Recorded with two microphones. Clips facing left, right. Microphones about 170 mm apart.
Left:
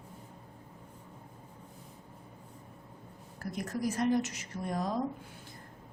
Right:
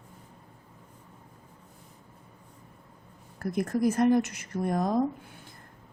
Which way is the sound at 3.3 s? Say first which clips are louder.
Right 8 dB; 55° right (ahead or behind).